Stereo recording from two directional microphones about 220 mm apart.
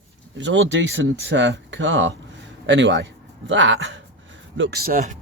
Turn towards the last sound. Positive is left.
turn(degrees=-40)  # may be behind; listen again after turning